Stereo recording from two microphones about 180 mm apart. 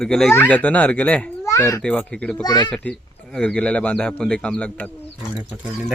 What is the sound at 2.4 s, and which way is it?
Speech, 20° left (ahead or behind).